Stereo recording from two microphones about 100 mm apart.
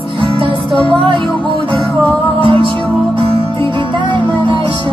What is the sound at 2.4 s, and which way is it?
Music, 65° right (ahead or behind).